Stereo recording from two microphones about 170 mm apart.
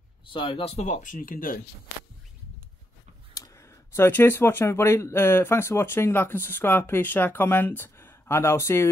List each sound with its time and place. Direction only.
0.3 s speech: 30° left (ahead or behind); by 1.6 s 55° left (ahead or behind)
3.3 s speech: 15° left (ahead or behind)